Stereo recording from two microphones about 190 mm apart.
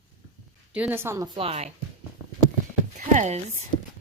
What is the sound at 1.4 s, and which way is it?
Speech, 30° right (ahead or behind).